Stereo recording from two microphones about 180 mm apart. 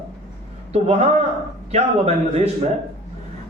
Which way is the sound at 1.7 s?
35° right (ahead or behind).